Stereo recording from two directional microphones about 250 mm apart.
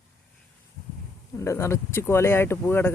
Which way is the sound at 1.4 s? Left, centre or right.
Centre.